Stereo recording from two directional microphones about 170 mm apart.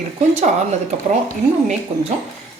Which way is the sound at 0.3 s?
40° right (ahead or behind).